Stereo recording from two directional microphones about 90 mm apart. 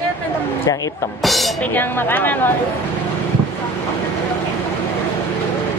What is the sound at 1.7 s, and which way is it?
Speech, 25° left (ahead or behind).